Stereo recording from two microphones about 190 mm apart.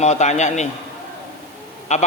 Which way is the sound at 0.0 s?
35° left (ahead or behind).